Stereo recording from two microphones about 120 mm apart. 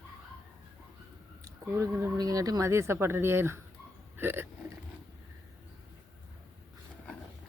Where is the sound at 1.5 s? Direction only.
25° right (ahead or behind).